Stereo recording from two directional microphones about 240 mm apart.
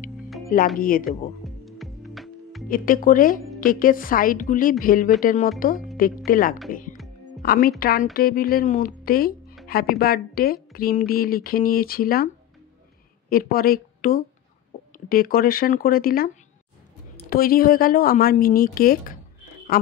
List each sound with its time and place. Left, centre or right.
0.7 s a woman's voice: left
1.4 s music: centre
2.7 s a woman's voice: left
6.7 s music: left
7.4 s a woman's voice: left
13.3 s a woman's voice: left
17.3 s a woman's voice: left